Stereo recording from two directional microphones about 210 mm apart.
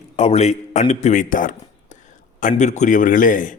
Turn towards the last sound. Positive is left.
turn(degrees=40)  # may be behind; listen again after turning